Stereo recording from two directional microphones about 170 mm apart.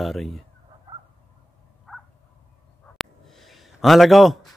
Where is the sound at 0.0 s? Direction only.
Centre (ahead or behind).